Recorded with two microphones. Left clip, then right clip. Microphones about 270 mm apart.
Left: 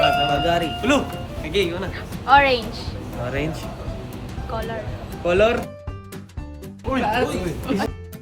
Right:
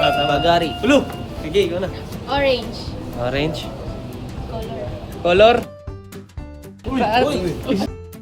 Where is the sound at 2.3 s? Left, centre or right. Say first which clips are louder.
Left 4 dB; centre.